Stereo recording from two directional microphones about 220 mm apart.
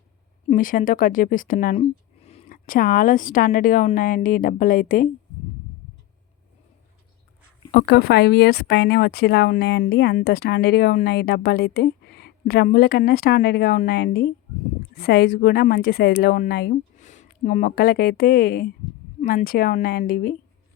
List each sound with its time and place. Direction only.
0.4 s speech: 40° left (ahead or behind)
7.7 s speech: 50° left (ahead or behind)